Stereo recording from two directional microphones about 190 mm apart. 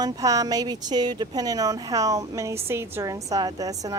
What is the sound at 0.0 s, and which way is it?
A woman's voice, 20° right (ahead or behind).